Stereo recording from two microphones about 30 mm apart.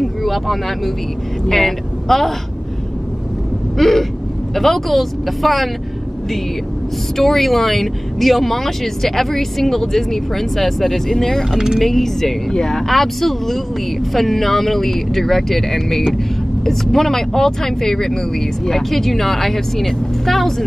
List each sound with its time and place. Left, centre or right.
0.0 s a woman's voice: centre
3.7 s a sound: centre
4.6 s speech: centre
7.2 s speech: centre
11.1 s speech: centre
11.5 s speech: centre
11.8 s speech: centre